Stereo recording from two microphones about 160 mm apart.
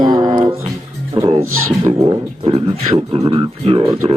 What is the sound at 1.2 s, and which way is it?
Music, 35° right (ahead or behind).